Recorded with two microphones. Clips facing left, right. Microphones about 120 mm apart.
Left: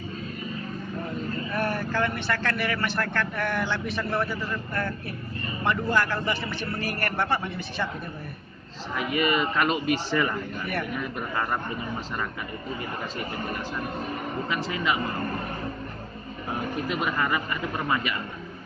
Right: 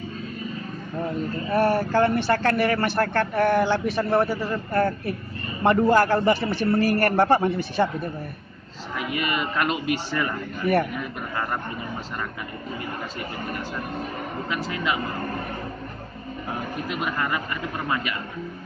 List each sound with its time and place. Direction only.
1.5 s a man's voice: 35° right (ahead or behind)
8.9 s speech: 5° right (ahead or behind)
17.0 s speech: centre (ahead or behind)